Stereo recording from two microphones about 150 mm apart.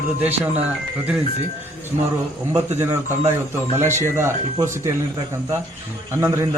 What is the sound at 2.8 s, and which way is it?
A man's voice, 20° right (ahead or behind).